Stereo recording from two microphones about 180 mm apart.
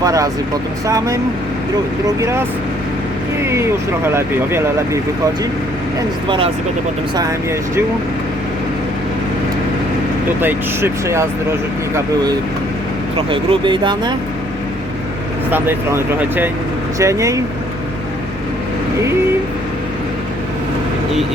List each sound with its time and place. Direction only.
0.0 s speech: 20° right (ahead or behind)
6.2 s speech: 25° right (ahead or behind)
10.4 s speech: 15° right (ahead or behind)
13.1 s speech: 30° right (ahead or behind)
15.4 s speech: 10° right (ahead or behind)